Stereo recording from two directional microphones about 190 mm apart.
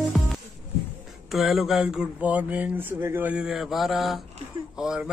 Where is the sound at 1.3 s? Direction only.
Centre (ahead or behind).